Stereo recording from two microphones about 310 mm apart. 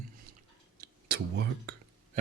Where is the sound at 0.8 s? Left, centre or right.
Right.